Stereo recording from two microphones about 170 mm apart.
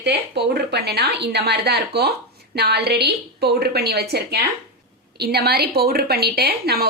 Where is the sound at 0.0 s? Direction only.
75° right (ahead or behind).